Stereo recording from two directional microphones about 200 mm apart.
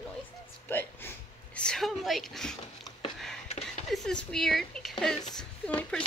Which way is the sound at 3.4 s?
35° left (ahead or behind).